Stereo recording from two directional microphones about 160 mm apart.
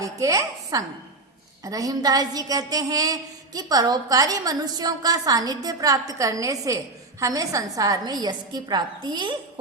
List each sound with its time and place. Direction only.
0.0 s a woman's voice: 20° right (ahead or behind)